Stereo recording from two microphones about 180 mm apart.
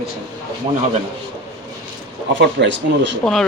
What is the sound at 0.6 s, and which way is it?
Speech, 25° right (ahead or behind).